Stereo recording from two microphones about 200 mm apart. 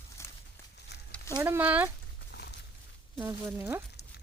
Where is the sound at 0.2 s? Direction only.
15° left (ahead or behind).